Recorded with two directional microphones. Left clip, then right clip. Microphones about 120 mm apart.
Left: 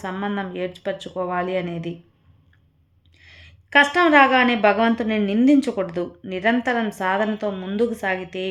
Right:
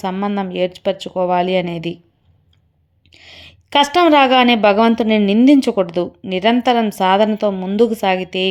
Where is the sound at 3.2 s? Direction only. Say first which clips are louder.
Right 8 dB; 45° right (ahead or behind).